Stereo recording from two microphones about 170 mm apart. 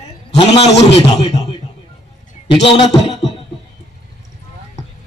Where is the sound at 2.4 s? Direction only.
30° left (ahead or behind).